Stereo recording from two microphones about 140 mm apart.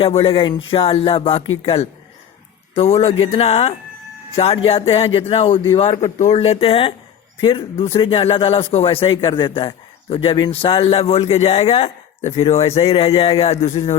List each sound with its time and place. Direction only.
0.0 s a man's voice: 45° left (ahead or behind)